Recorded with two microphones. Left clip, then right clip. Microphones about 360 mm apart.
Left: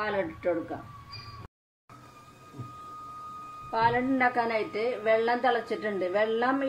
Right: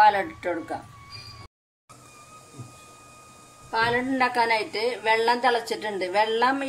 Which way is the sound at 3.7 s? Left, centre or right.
Right.